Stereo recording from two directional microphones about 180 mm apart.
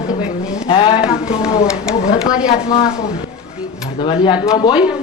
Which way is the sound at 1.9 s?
40° left (ahead or behind).